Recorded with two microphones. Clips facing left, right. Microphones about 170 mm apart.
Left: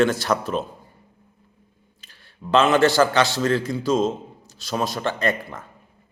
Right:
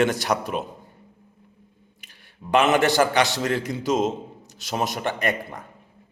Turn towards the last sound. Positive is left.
turn(degrees=-20)  # may be behind; listen again after turning